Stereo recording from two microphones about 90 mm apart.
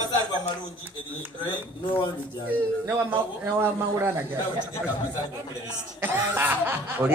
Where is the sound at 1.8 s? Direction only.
60° left (ahead or behind).